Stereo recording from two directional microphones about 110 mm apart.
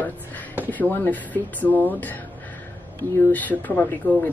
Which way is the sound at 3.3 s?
15° left (ahead or behind).